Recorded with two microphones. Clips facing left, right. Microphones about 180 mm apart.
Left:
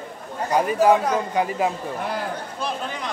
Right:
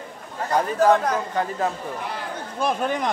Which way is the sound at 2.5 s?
50° right (ahead or behind).